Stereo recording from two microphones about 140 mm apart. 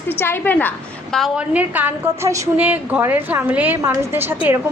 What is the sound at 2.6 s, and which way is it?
A woman's voice, 10° right (ahead or behind).